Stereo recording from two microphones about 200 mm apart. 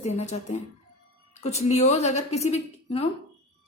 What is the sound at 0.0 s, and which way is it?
A woman's voice, 35° left (ahead or behind).